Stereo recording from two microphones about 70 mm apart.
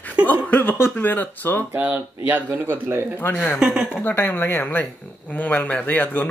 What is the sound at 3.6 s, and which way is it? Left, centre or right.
Speech, centre.